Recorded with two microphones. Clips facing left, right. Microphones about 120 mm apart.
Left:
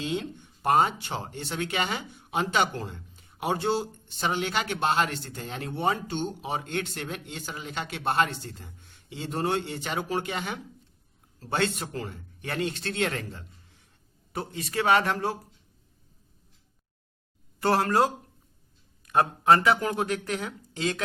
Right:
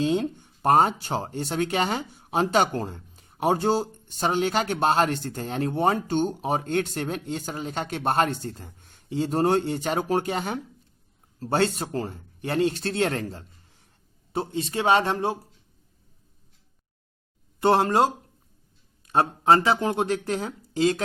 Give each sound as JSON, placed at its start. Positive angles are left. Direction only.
{"t": 0.0, "sound": "speech", "side_deg": -45}
{"t": 14.3, "sound": "speech", "side_deg": -25}
{"t": 17.6, "sound": "speech", "side_deg": -25}